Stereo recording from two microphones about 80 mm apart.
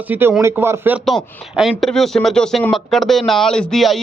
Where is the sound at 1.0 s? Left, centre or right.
Centre.